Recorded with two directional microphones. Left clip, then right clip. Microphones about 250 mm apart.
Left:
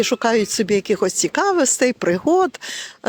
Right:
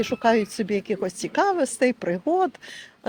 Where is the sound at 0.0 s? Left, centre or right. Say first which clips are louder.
Left 3 dB; left.